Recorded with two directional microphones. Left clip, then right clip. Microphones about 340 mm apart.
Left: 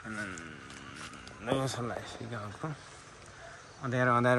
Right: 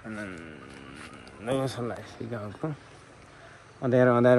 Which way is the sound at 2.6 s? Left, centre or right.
Centre.